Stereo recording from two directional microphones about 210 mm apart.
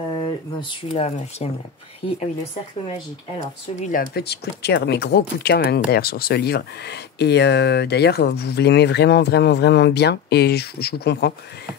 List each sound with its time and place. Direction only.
0.1 s speech: 25° left (ahead or behind)
3.9 s speech: 50° left (ahead or behind)